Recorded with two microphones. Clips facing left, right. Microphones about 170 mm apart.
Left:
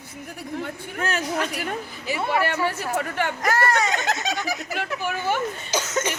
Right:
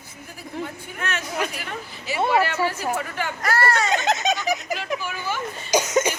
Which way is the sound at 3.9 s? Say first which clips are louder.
Right 4 dB; 20° right (ahead or behind).